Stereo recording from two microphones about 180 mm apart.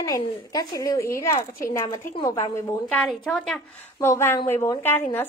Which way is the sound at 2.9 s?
5° left (ahead or behind).